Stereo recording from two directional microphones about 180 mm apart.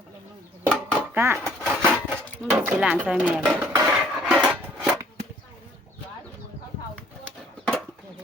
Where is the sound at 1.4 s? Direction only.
5° left (ahead or behind).